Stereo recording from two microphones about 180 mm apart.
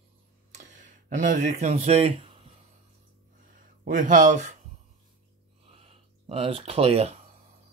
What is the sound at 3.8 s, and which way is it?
Speech, 45° right (ahead or behind).